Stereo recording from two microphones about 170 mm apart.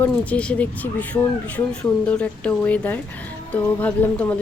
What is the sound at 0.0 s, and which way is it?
Speech, 10° left (ahead or behind).